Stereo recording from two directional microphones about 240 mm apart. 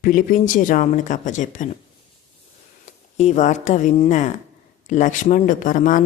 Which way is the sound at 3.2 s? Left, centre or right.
Left.